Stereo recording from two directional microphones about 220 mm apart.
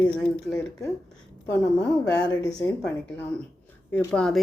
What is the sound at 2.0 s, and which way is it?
Speech, 50° left (ahead or behind).